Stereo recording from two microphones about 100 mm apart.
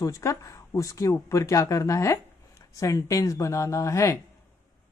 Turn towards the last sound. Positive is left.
turn(degrees=30)  # may be behind; listen again after turning